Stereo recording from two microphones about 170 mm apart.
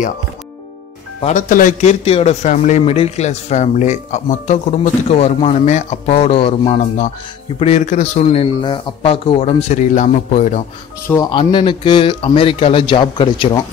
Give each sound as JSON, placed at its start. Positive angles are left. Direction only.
{"t": 1.2, "sound": "a man's voice", "side_deg": 50}
{"t": 11.1, "sound": "speech", "side_deg": 25}